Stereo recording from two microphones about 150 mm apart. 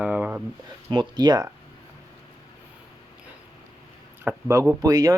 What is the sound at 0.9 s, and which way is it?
Speech, 30° right (ahead or behind).